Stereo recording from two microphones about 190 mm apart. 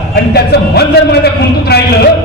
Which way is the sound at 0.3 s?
60° left (ahead or behind).